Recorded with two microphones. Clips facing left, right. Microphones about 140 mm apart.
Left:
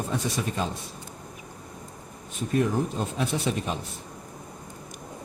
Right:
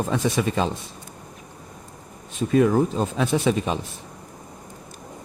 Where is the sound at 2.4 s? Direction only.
90° right.